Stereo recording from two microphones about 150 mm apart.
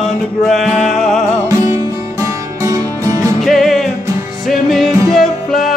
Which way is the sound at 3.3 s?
Centre (ahead or behind).